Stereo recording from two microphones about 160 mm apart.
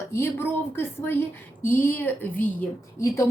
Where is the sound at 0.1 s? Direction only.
15° left (ahead or behind).